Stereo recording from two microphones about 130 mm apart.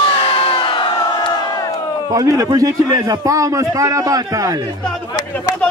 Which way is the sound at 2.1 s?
25° right (ahead or behind).